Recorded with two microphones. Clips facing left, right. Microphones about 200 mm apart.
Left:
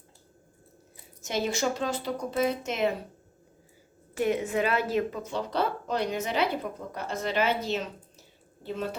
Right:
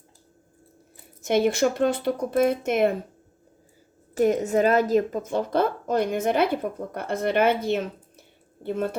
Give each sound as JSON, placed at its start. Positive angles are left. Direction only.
{"t": 1.2, "sound": "speech", "side_deg": -55}
{"t": 4.1, "sound": "speech", "side_deg": -40}